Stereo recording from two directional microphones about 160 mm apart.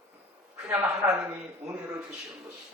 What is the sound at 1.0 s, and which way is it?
Speech, 15° right (ahead or behind).